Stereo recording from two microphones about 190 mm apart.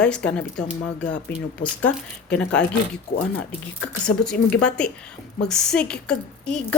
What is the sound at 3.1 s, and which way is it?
Speech, 40° left (ahead or behind).